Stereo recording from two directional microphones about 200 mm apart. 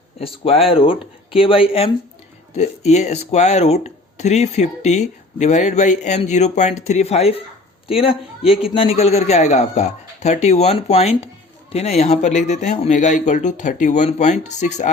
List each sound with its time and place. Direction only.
0.2 s speech: 30° left (ahead or behind)